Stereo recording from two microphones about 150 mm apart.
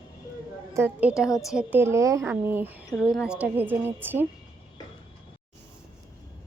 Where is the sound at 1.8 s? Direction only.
20° right (ahead or behind).